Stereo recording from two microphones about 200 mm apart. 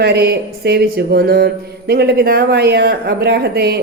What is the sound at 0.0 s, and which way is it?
Speech, 55° right (ahead or behind).